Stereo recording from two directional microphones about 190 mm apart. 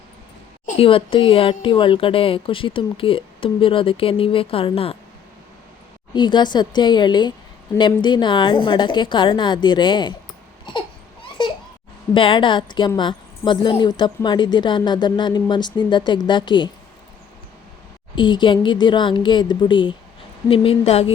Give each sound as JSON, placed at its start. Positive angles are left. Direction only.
{"t": 0.6, "sound": "speech", "side_deg": 30}
{"t": 6.1, "sound": "speech", "side_deg": 25}
{"t": 10.7, "sound": "baby cry", "side_deg": 25}
{"t": 12.1, "sound": "speech", "side_deg": 25}
{"t": 18.1, "sound": "speech", "side_deg": 25}